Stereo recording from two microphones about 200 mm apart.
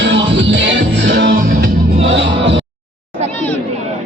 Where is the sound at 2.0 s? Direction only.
70° right (ahead or behind).